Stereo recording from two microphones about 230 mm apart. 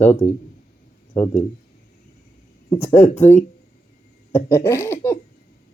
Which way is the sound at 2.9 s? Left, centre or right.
Left.